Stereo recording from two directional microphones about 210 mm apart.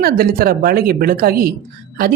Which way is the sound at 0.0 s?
45° right (ahead or behind).